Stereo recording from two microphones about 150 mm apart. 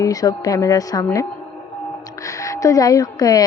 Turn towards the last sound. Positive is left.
turn(degrees=25)  # may be behind; listen again after turning